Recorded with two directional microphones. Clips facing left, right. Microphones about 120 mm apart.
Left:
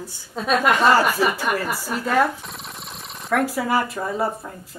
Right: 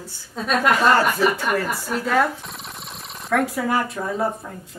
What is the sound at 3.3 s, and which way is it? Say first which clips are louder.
Speech: even; centre (ahead or behind).